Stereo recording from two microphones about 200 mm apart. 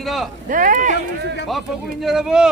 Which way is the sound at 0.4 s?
40° right (ahead or behind).